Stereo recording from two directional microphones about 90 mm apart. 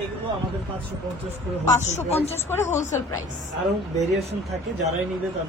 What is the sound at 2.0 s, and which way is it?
Speech, 25° left (ahead or behind).